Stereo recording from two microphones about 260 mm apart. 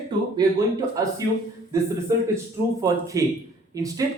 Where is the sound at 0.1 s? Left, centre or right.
Centre.